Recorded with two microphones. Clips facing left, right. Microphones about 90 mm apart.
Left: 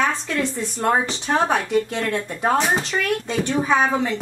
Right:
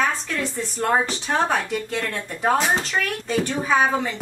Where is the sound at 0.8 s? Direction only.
10° left (ahead or behind).